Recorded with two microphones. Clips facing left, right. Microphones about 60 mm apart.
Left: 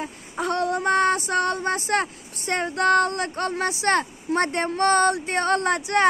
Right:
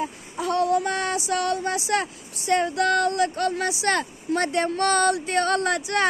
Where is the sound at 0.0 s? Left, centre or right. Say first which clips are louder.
Even; left.